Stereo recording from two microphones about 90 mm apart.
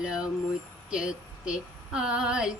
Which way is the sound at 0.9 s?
10° right (ahead or behind).